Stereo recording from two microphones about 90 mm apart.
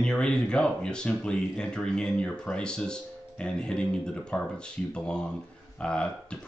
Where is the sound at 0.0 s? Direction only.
10° left (ahead or behind).